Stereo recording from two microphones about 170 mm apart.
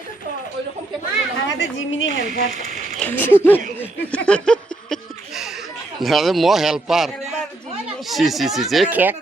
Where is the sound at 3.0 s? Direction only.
10° left (ahead or behind).